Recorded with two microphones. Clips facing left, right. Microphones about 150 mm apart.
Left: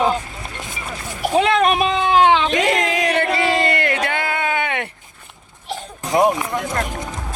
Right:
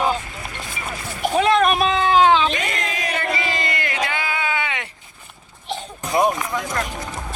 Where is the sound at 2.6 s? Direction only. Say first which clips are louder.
Left 8 dB; 90° left; by 4.9 s 55° left (ahead or behind).